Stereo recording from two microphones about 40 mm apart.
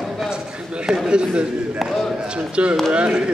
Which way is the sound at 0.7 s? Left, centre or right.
Centre.